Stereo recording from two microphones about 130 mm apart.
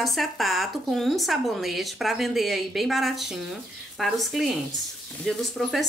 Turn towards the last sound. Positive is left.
turn(degrees=0)  # may be behind; listen again after turning